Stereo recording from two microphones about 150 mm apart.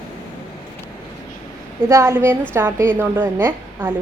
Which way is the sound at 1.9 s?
20° right (ahead or behind).